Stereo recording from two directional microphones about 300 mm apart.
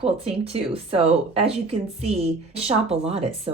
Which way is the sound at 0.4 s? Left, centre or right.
Centre.